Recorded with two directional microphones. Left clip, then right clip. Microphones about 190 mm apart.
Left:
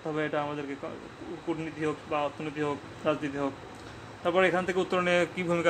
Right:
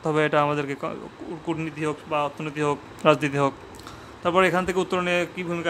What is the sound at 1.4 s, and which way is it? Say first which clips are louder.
Speech: right 4 dB; 25° right (ahead or behind).